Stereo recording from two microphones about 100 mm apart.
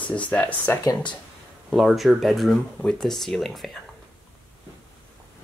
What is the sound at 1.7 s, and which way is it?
Speech, centre (ahead or behind).